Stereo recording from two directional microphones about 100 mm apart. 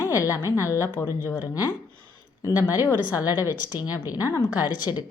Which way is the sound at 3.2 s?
35° left (ahead or behind).